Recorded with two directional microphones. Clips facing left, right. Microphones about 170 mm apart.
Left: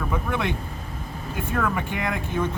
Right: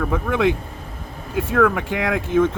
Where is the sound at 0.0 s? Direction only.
90° right.